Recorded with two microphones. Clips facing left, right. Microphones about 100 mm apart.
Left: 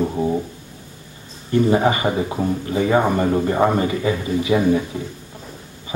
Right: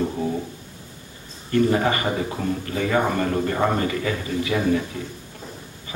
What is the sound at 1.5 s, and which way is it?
A man's voice, 20° left (ahead or behind).